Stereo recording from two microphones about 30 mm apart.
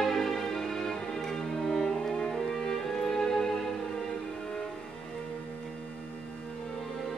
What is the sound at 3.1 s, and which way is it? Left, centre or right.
Music, left.